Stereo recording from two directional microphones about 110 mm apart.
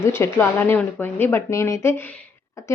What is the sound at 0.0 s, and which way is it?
A woman's voice, 20° left (ahead or behind).